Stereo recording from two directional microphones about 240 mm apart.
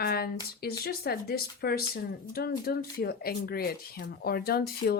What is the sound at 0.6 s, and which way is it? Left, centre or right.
Speech, left.